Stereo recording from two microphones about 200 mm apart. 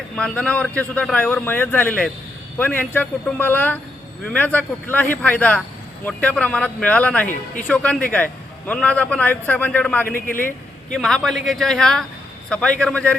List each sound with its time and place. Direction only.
0.2 s a man's voice: 5° left (ahead or behind)
10.2 s speech: 45° left (ahead or behind)
10.9 s a man's voice: 5° left (ahead or behind)